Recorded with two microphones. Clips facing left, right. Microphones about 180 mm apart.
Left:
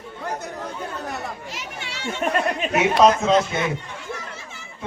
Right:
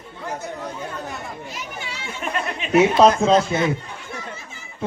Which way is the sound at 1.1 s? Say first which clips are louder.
Left 1 dB; 85° left.